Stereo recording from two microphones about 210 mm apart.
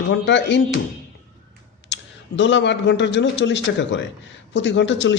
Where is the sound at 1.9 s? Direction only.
60° left (ahead or behind).